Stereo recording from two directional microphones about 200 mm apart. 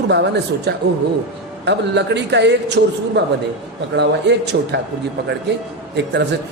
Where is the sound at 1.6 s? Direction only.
60° right (ahead or behind).